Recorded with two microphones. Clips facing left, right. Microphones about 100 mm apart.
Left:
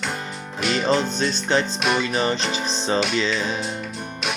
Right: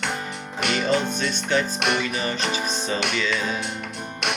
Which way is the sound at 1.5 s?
30° left (ahead or behind).